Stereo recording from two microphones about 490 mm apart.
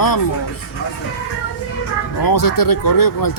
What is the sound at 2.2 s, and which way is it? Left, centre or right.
Speech, left.